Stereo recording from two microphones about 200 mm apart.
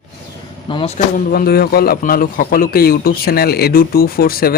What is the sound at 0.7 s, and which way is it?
Speech, 30° left (ahead or behind).